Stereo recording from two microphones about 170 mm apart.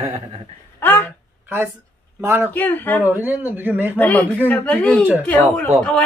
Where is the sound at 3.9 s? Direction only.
10° left (ahead or behind).